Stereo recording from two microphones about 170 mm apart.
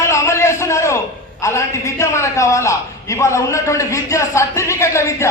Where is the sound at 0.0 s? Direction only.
15° left (ahead or behind).